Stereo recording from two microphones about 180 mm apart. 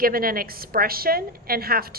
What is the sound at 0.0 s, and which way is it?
A woman's voice, 55° right (ahead or behind).